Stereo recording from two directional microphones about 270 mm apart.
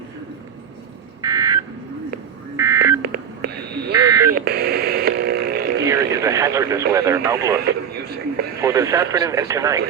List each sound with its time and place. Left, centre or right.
1.2 s a sound: centre
2.6 s buzzer: centre
3.0 s a sound: right
3.9 s buzzer: centre
4.4 s radio: right
5.8 s speech: centre
8.6 s speech: centre